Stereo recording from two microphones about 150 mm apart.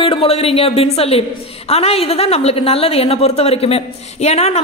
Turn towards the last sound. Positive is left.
turn(degrees=45)  # may be behind; listen again after turning